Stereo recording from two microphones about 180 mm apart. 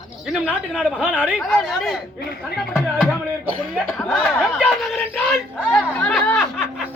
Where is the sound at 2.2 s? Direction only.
55° left (ahead or behind).